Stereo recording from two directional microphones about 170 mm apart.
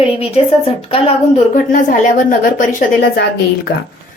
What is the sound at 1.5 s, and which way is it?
Speech, 50° left (ahead or behind).